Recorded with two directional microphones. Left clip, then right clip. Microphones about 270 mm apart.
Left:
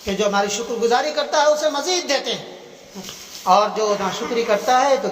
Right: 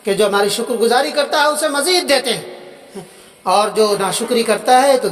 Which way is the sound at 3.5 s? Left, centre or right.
Right.